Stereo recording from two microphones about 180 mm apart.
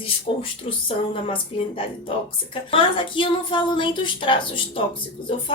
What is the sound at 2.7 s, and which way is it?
A woman's voice, 30° left (ahead or behind).